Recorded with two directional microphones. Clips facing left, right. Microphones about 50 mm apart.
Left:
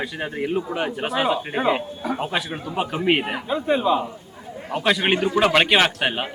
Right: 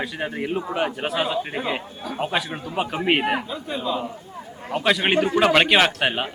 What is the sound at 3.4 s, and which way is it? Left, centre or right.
Speech, left.